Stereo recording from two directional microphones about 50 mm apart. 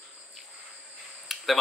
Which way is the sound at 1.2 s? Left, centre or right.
Centre.